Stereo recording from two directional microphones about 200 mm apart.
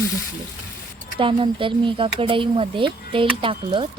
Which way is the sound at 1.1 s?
25° right (ahead or behind).